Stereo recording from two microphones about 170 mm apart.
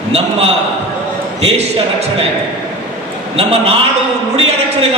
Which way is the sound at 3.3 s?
35° right (ahead or behind).